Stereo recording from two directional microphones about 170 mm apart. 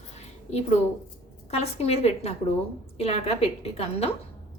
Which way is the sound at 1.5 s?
35° left (ahead or behind).